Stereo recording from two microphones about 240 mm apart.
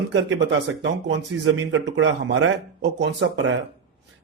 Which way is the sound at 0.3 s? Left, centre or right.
Right.